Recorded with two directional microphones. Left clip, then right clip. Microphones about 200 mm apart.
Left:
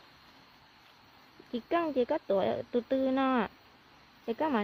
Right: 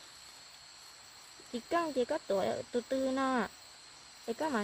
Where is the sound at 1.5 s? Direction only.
20° left (ahead or behind).